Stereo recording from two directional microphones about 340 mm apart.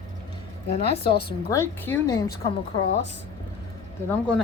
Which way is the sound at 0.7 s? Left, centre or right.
Centre.